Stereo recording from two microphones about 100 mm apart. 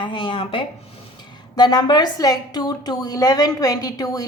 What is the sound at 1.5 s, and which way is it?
A woman's voice, 45° left (ahead or behind).